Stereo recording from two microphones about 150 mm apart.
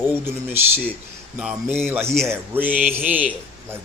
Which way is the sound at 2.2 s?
15° right (ahead or behind).